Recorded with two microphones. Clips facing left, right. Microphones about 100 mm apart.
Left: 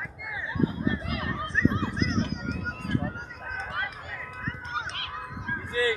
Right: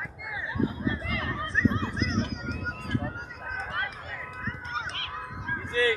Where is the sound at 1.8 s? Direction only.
Centre (ahead or behind).